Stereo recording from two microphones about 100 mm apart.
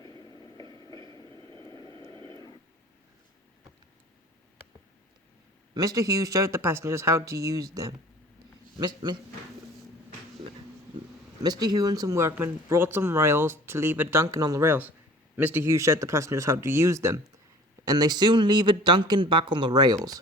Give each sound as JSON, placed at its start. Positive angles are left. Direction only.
{"t": 0.0, "sound": "vehicle", "side_deg": 35}
{"t": 0.7, "sound": "train", "side_deg": 35}
{"t": 1.0, "sound": "vehicle", "side_deg": 30}
{"t": 1.5, "sound": "vehicle", "side_deg": -55}
{"t": 2.0, "sound": "a sound", "side_deg": -55}
{"t": 5.7, "sound": "speech", "side_deg": -40}
{"t": 8.8, "sound": "speech", "side_deg": -50}
{"t": 11.4, "sound": "speech", "side_deg": -40}
{"t": 14.7, "sound": "speech", "side_deg": -15}
{"t": 15.6, "sound": "speech", "side_deg": -30}
{"t": 17.8, "sound": "speech", "side_deg": -45}